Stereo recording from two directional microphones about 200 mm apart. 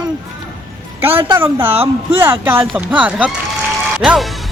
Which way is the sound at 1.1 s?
25° right (ahead or behind).